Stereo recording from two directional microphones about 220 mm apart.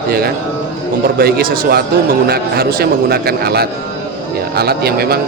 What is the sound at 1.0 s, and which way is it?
A man's voice, 40° right (ahead or behind).